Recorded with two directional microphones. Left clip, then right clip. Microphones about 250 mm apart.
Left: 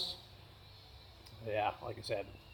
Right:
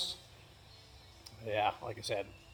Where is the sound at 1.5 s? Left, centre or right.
Right.